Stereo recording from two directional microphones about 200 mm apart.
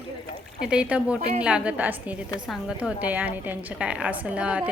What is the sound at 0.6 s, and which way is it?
A woman's voice, 5° right (ahead or behind).